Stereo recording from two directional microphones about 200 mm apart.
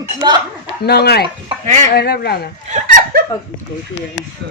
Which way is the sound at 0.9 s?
55° left (ahead or behind).